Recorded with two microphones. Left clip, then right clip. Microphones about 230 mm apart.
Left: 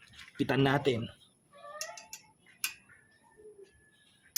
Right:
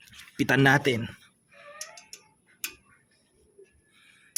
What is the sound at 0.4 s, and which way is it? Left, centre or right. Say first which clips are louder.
Speech: right 7 dB; right.